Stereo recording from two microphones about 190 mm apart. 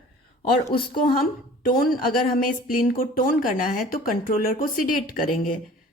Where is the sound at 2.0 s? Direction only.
50° left (ahead or behind).